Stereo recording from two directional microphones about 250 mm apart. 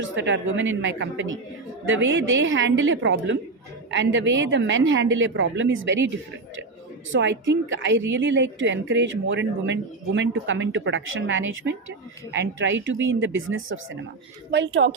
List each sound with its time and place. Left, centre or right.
0.0 s a woman's voice: right
7.1 s a woman's voice: right